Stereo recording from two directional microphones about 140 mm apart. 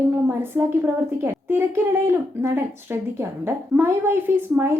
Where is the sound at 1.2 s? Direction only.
15° right (ahead or behind).